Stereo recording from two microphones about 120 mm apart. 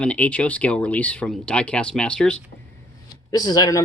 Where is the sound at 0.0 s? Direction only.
10° left (ahead or behind).